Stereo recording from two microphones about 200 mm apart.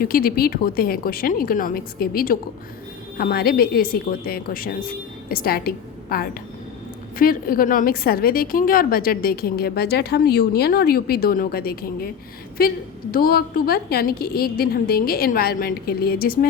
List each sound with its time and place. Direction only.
0.0 s a woman's voice: 45° left (ahead or behind)